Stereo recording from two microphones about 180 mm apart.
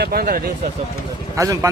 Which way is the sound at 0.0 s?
60° right (ahead or behind).